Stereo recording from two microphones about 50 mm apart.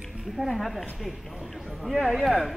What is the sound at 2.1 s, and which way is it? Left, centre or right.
Speech, centre.